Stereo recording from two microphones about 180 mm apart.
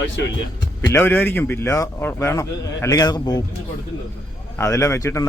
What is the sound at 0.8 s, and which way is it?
A man's voice, 10° left (ahead or behind).